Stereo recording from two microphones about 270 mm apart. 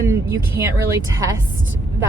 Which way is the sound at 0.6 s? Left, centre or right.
Right.